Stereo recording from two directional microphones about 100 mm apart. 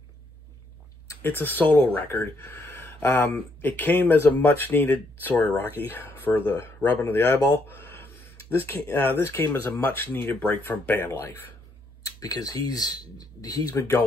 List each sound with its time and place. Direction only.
1.2 s speech: 20° left (ahead or behind)
12.0 s speech: 40° left (ahead or behind)